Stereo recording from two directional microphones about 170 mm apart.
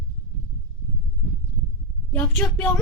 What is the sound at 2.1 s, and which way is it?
Speech, 10° left (ahead or behind).